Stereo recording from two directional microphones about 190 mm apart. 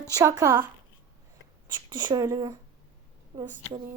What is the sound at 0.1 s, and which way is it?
Speech, 15° right (ahead or behind).